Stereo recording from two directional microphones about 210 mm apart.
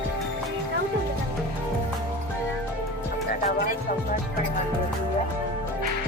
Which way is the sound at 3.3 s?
40° left (ahead or behind).